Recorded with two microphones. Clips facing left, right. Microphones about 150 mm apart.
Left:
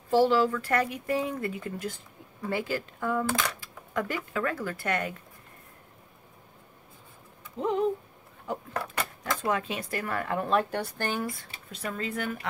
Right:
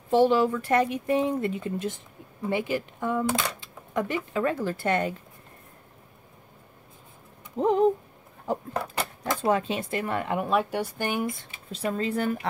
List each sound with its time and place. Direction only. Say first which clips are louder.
0.1 s speech: right 2 dB; 20° right (ahead or behind)
7.6 s speech: right 5 dB; 40° right (ahead or behind); by 11.3 s 15° right (ahead or behind)
11.7 s speech: right 6 dB; 30° right (ahead or behind)